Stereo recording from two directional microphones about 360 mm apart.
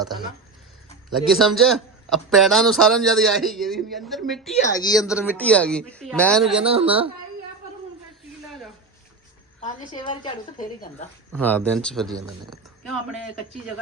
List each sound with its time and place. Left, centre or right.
1.3 s a man's voice: centre
6.7 s speech: centre
8.4 s a sound: centre
9.6 s a woman's voice: centre
11.3 s a man's voice: centre